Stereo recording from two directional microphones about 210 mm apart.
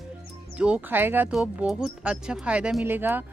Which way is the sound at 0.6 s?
5° right (ahead or behind).